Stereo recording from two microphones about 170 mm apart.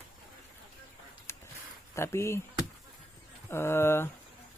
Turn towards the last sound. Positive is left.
turn(degrees=15)  # may be behind; listen again after turning